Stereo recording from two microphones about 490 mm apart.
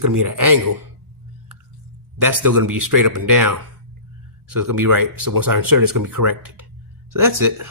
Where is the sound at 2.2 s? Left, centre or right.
Right.